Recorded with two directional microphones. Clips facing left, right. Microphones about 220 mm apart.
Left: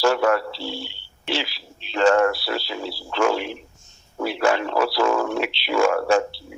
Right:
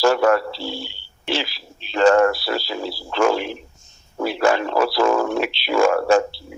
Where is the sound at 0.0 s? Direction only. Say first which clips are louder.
Right 3 dB; 40° right (ahead or behind).